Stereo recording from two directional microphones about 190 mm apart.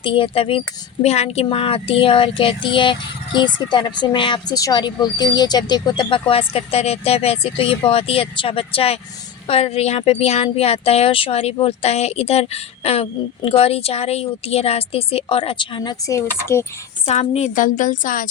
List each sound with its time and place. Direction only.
0.0 s speech: 30° left (ahead or behind)
17.1 s a woman's voice: 35° left (ahead or behind)